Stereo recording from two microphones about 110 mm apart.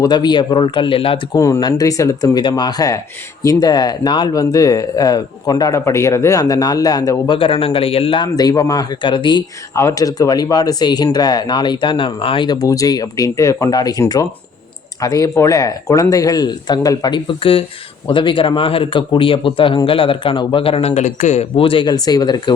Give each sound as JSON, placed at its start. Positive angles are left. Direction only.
{"t": 0.0, "sound": "speech", "side_deg": 40}
{"t": 1.3, "sound": "speech", "side_deg": 30}
{"t": 2.4, "sound": "speech", "side_deg": 40}
{"t": 7.3, "sound": "a man's voice", "side_deg": 50}
{"t": 8.4, "sound": "speech", "side_deg": 35}
{"t": 9.7, "sound": "speech", "side_deg": 30}
{"t": 12.5, "sound": "speech", "side_deg": 30}
{"t": 21.9, "sound": "speech", "side_deg": 35}